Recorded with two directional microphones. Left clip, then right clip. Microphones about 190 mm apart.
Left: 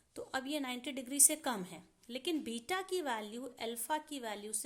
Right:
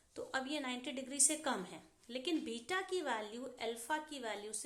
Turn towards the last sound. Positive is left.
turn(degrees=45)  # may be behind; listen again after turning